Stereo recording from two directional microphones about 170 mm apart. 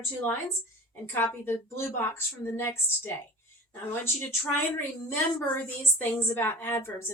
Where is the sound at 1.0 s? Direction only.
15° left (ahead or behind).